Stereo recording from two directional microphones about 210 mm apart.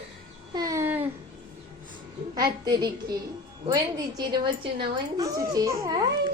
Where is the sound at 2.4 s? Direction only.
20° right (ahead or behind).